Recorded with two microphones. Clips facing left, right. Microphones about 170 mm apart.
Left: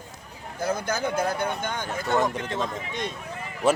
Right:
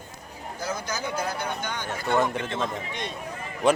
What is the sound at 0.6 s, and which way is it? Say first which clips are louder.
Speech: left 5 dB; 55° left (ahead or behind).